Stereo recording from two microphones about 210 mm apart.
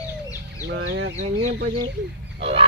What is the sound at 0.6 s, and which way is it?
Speech, 60° right (ahead or behind).